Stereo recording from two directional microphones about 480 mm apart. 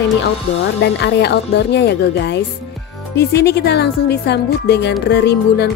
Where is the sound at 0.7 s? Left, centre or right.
Left.